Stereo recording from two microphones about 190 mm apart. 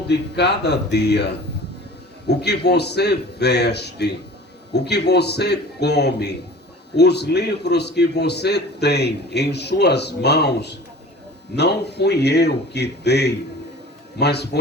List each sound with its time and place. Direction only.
0.1 s a man's voice: 60° left (ahead or behind)